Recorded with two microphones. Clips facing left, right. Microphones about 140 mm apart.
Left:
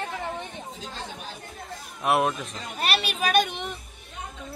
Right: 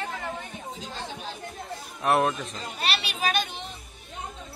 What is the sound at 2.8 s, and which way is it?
Speech, 50° left (ahead or behind).